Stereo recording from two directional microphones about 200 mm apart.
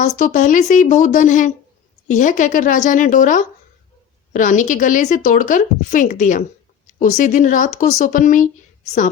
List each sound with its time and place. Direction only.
0.0 s a woman's voice: 40° left (ahead or behind)